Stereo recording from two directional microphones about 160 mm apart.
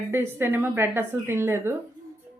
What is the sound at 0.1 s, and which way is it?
Speech, 15° right (ahead or behind).